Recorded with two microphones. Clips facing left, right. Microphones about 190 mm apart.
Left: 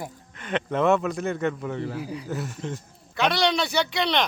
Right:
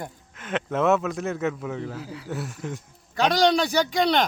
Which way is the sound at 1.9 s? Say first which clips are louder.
Left 4 dB; 15° left (ahead or behind).